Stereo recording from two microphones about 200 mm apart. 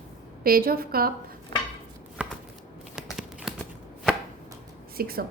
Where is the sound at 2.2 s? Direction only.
5° right (ahead or behind).